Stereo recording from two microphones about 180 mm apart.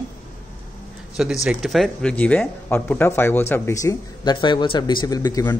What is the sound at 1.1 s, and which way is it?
Speech, centre (ahead or behind).